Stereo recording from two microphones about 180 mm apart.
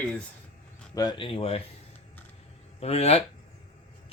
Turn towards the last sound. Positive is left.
turn(degrees=35)  # may be behind; listen again after turning